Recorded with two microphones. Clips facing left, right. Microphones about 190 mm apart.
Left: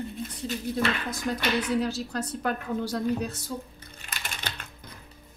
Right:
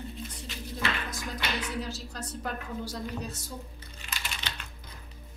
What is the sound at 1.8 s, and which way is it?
A woman's voice, 65° left (ahead or behind).